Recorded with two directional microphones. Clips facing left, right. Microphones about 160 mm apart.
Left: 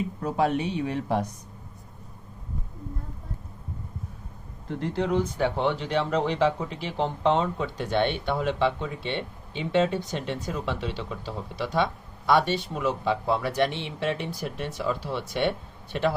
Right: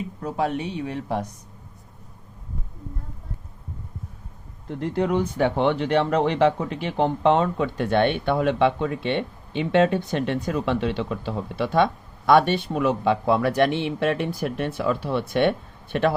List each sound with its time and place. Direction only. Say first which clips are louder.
4.8 s speech: right 3 dB; 60° right (ahead or behind)